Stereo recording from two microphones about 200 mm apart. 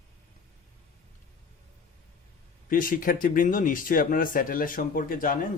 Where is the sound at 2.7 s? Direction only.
45° left (ahead or behind).